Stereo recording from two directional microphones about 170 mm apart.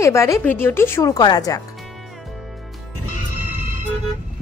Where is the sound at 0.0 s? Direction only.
15° left (ahead or behind).